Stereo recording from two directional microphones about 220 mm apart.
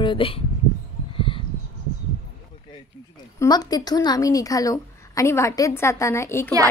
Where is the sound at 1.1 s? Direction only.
25° left (ahead or behind).